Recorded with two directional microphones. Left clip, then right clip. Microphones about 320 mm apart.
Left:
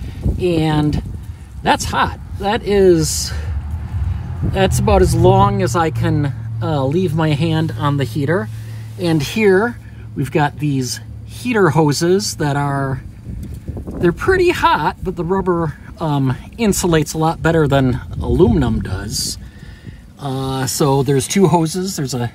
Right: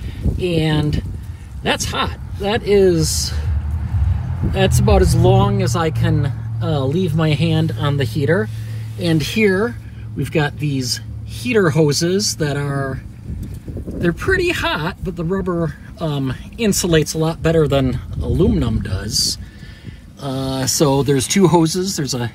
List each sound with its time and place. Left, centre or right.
0.4 s speech: left
4.6 s speech: left
13.9 s speech: left